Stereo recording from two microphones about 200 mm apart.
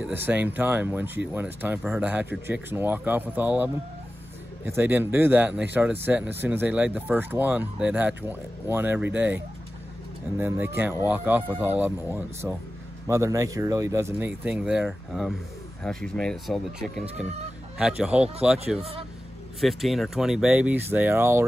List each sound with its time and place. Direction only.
0.0 s speech: 10° right (ahead or behind)
18.8 s a man's voice: 30° right (ahead or behind)
19.6 s speech: centre (ahead or behind)